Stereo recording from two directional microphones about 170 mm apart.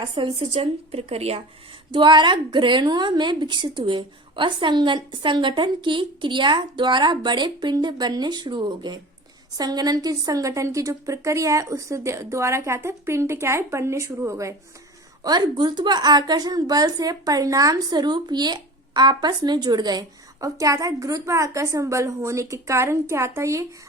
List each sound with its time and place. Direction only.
0.0 s a woman's voice: 30° right (ahead or behind)